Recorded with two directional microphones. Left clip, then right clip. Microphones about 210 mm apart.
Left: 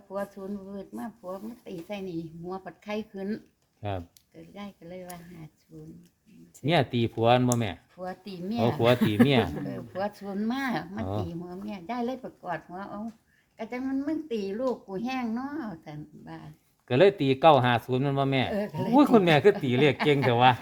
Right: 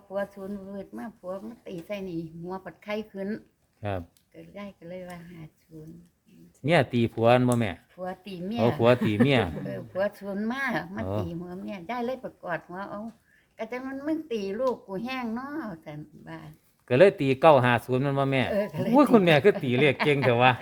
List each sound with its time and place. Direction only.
0.1 s speech: 5° right (ahead or behind)
3.8 s speech: 20° right (ahead or behind)
4.4 s speech: centre (ahead or behind)
6.7 s a man's voice: 15° right (ahead or behind)
7.9 s speech: 5° right (ahead or behind)
9.2 s a man's voice: 15° right (ahead or behind)
9.6 s a man's voice: 5° right (ahead or behind)